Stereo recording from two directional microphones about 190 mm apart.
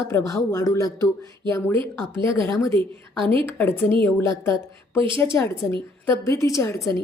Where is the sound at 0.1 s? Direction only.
15° left (ahead or behind).